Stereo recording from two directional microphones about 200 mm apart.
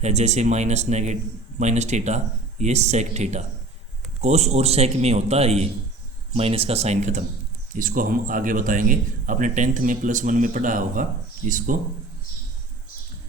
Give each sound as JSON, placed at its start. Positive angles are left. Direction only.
{"t": 0.0, "sound": "a man's voice", "side_deg": -35}